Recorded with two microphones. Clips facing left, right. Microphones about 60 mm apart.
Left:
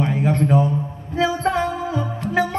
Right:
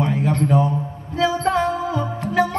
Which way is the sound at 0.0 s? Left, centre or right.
Left.